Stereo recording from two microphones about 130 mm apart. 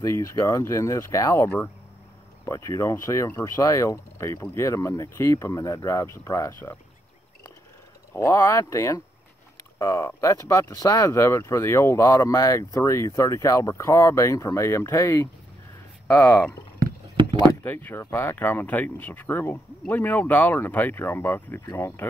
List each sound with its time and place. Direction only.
0.0 s speech: 25° left (ahead or behind)
8.1 s speech: 20° left (ahead or behind)
17.2 s vehicle: 40° right (ahead or behind)
17.6 s speech: 15° left (ahead or behind)